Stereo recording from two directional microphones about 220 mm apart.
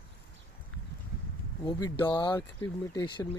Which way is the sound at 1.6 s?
20° left (ahead or behind).